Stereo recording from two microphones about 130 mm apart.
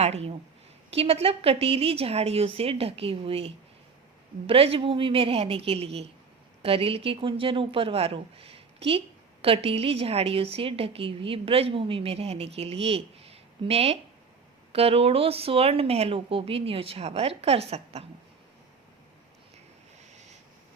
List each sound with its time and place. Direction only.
0.0 s speech: 55° right (ahead or behind)